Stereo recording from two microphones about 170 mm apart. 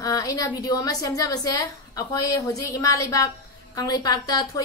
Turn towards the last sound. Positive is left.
turn(degrees=20)  # may be behind; listen again after turning